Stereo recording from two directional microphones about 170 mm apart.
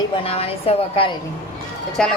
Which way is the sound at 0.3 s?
35° left (ahead or behind).